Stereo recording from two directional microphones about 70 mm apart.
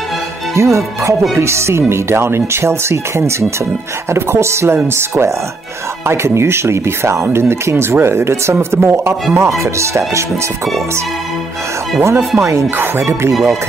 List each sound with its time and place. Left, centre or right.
0.6 s speech: right
9.3 s speech: right
12.0 s speech: right
13.3 s speech: centre